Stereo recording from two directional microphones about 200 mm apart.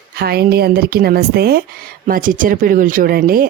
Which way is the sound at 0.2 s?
50° right (ahead or behind).